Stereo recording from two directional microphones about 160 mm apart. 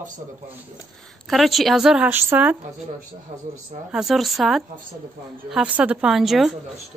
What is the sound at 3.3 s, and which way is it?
Speech, 45° right (ahead or behind).